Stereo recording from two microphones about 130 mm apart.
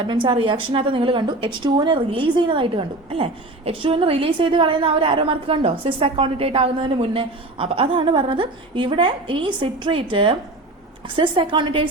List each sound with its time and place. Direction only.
0.0 s a woman's voice: 40° right (ahead or behind)